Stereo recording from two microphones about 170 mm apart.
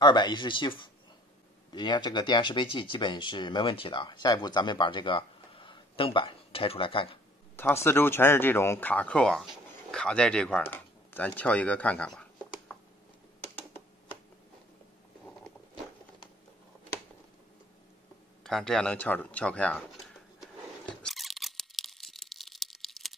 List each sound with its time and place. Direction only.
0.0 s speech: 25° left (ahead or behind)
7.5 s speech: 15° left (ahead or behind)
18.4 s a sound: 5° left (ahead or behind)